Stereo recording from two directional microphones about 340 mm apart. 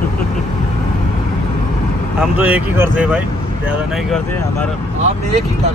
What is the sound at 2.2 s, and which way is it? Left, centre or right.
Speech, centre.